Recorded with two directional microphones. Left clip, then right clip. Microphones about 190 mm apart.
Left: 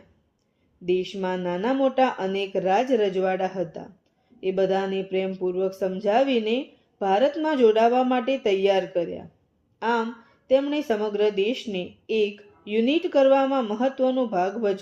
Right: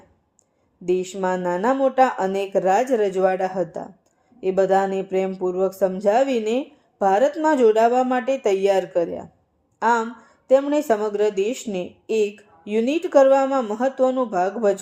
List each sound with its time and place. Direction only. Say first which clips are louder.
0.9 s a woman's voice: right 3 dB; 45° right (ahead or behind)